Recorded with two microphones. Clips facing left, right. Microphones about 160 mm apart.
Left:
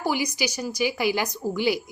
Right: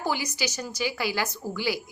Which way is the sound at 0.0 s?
15° left (ahead or behind).